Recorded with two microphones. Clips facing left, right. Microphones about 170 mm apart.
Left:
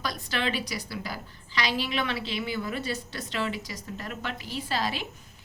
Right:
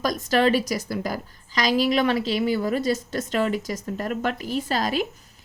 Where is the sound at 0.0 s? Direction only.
45° right (ahead or behind).